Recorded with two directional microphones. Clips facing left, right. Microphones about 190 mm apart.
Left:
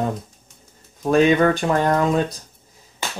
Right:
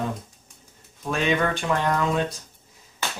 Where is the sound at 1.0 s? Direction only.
40° left (ahead or behind).